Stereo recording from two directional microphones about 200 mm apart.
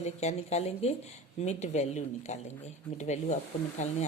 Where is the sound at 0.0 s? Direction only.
35° left (ahead or behind).